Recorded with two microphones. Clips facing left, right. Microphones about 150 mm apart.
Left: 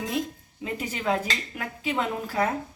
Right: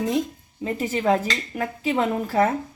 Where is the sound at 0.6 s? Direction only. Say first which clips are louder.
Right 6 dB; 40° right (ahead or behind).